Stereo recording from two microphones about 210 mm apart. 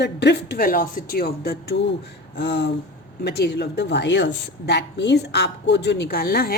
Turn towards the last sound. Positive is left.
turn(degrees=45)  # may be behind; listen again after turning